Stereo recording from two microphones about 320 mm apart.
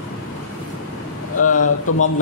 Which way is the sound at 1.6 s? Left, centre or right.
Left.